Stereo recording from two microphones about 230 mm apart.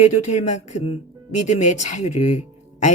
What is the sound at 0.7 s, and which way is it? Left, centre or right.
Speech, left.